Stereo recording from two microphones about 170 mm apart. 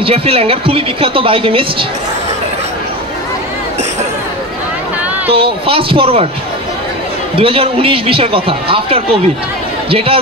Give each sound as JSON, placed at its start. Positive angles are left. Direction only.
{"t": 0.0, "sound": "a woman's voice", "side_deg": -35}
{"t": 5.3, "sound": "a woman's voice", "side_deg": -35}
{"t": 7.3, "sound": "a woman's voice", "side_deg": -35}